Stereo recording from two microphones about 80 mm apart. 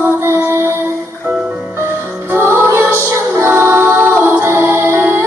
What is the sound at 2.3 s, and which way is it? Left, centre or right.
Music, right.